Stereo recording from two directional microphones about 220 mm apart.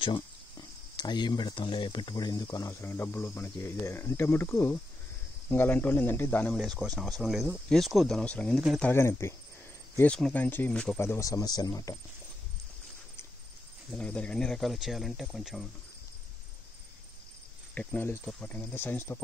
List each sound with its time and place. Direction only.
0.0 s speech: 20° left (ahead or behind); by 8.9 s centre (ahead or behind)
8.9 s speech: 10° left (ahead or behind)
13.9 s speech: 5° left (ahead or behind)
17.7 s speech: 10° left (ahead or behind)